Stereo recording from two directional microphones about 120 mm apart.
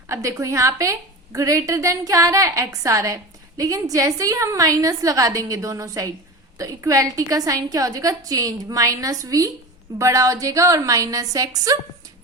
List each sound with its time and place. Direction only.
0.1 s a woman's voice: 25° right (ahead or behind)